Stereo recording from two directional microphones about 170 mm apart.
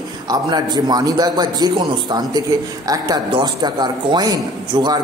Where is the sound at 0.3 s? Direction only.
25° right (ahead or behind).